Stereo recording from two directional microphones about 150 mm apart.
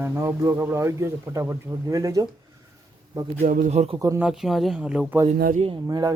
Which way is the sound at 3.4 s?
60° right (ahead or behind).